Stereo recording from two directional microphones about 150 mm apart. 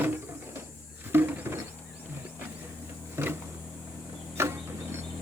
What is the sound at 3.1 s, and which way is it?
Power windows, 15° right (ahead or behind).